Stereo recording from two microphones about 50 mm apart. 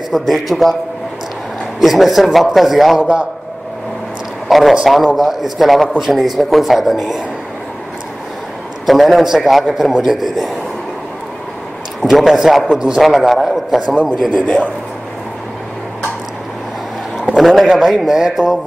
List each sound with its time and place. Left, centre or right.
0.1 s speech: centre
1.8 s speech: centre
3.0 s a man's voice: centre
4.5 s a man's voice: centre
8.8 s a man's voice: centre
12.1 s a man's voice: centre
13.0 s speech: centre
17.4 s speech: centre